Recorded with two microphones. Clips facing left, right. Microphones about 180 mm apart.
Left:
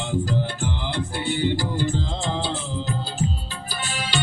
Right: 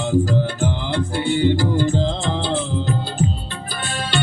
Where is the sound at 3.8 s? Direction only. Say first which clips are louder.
Right 4 dB; 60° right (ahead or behind).